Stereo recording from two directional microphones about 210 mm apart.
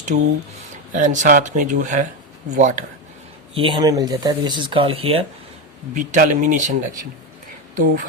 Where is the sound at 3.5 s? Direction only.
25° right (ahead or behind).